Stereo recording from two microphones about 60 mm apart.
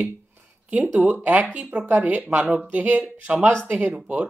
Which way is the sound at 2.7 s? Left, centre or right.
Right.